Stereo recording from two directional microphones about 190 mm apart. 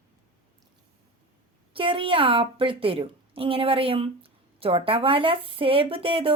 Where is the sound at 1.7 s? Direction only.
25° right (ahead or behind).